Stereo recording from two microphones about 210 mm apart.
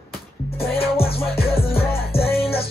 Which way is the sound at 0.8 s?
30° left (ahead or behind).